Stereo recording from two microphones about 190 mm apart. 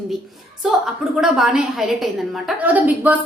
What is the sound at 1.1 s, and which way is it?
A woman's voice, 5° right (ahead or behind).